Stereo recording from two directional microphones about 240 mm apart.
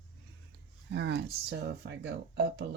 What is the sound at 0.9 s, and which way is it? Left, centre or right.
Speech, right.